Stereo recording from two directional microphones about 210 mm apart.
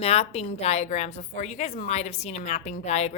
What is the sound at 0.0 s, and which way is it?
A woman's voice, 30° left (ahead or behind).